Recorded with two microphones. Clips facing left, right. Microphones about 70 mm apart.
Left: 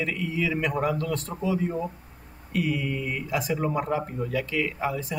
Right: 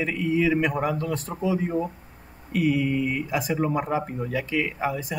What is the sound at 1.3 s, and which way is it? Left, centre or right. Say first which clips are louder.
Speech: right 2 dB; right.